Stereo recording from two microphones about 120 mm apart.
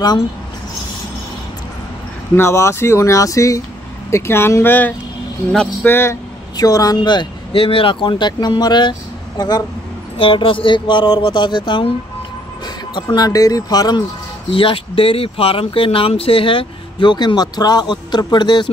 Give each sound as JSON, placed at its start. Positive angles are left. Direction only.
{"t": 2.3, "sound": "speech", "side_deg": 20}
{"t": 5.5, "sound": "speech", "side_deg": 0}
{"t": 5.9, "sound": "speech", "side_deg": 20}
{"t": 6.5, "sound": "speech", "side_deg": 30}
{"t": 10.1, "sound": "speech", "side_deg": 45}
{"t": 12.9, "sound": "speech", "side_deg": 35}
{"t": 14.5, "sound": "speech", "side_deg": 45}